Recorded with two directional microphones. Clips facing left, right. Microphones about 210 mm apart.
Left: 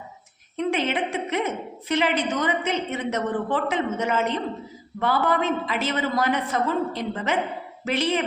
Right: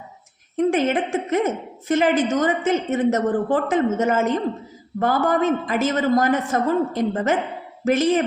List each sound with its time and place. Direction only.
0.5 s a woman's voice: 45° right (ahead or behind)